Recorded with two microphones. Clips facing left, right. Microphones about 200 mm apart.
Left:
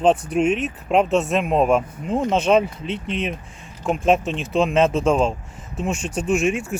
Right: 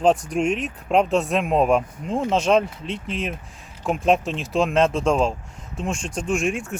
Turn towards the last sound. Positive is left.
turn(degrees=5)  # may be behind; listen again after turning